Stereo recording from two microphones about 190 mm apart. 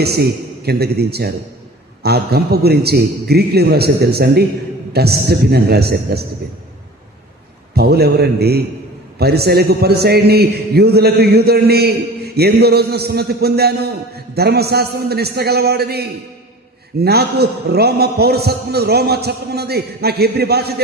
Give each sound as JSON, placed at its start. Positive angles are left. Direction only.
{"t": 0.0, "sound": "a man's voice", "side_deg": -55}
{"t": 7.8, "sound": "a man's voice", "side_deg": -55}